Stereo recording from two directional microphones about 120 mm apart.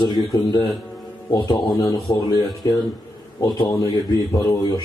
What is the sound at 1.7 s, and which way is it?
Speech, 25° left (ahead or behind).